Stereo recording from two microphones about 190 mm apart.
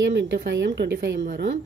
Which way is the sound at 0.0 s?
70° right (ahead or behind).